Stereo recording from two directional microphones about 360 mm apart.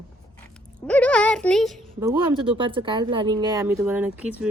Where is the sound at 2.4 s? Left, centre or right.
Centre.